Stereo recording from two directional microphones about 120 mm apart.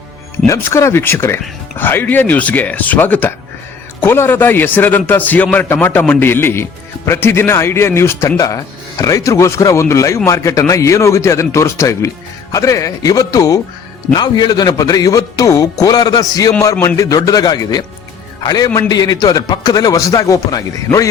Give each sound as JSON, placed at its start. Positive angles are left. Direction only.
{"t": 0.4, "sound": "a man's voice", "side_deg": 25}